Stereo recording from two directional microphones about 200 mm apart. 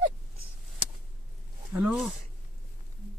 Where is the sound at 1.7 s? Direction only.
10° right (ahead or behind).